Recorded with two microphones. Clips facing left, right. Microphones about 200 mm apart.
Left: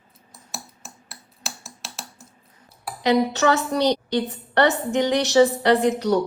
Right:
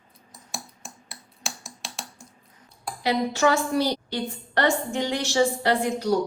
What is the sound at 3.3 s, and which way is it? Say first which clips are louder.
Speech: left 1 dB; 65° left (ahead or behind).